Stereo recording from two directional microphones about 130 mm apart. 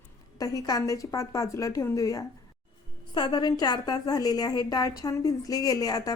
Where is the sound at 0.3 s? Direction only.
30° left (ahead or behind).